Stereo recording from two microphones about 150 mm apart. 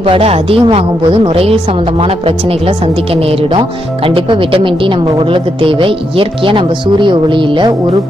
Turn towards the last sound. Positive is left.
turn(degrees=-35)  # may be behind; listen again after turning